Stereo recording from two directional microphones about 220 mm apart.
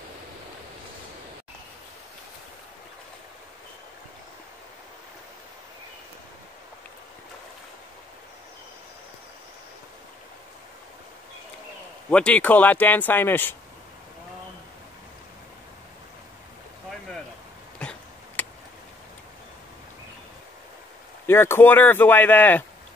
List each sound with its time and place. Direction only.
12.1 s speech: 5° left (ahead or behind)
17.7 s a sound: 5° left (ahead or behind)
21.3 s speech: 10° left (ahead or behind)